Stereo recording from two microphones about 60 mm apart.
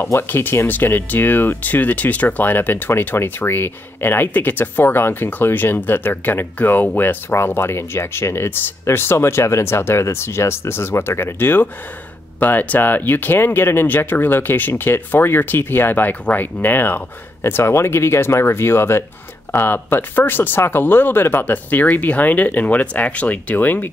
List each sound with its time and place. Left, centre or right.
0.0 s speech: left